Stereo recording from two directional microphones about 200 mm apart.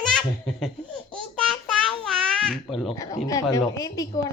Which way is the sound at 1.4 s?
5° left (ahead or behind).